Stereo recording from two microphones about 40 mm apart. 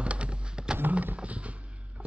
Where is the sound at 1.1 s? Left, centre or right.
Right.